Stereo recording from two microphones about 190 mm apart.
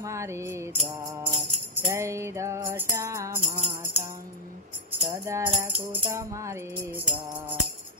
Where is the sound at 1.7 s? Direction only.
15° right (ahead or behind).